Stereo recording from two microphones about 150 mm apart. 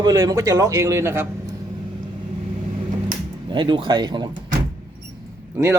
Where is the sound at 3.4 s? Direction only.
30° right (ahead or behind).